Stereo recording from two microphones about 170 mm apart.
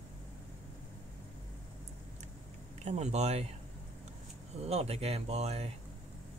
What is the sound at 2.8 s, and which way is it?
Speech, 40° right (ahead or behind).